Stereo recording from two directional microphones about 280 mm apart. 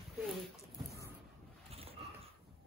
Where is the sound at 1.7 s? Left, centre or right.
Right.